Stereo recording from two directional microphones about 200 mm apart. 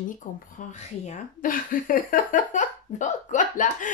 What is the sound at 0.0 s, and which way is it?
Speech, 40° left (ahead or behind).